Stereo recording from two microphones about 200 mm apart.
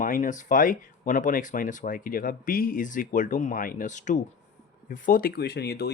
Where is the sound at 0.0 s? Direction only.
40° left (ahead or behind).